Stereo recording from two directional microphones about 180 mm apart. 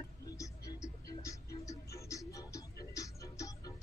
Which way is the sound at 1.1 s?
20° left (ahead or behind).